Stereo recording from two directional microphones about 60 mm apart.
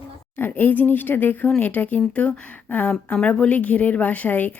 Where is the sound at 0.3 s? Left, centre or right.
Left.